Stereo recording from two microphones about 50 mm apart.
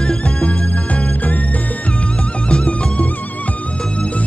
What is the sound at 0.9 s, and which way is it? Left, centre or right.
Music, left.